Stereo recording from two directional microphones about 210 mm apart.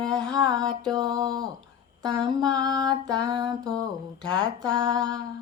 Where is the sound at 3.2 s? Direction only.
20° right (ahead or behind).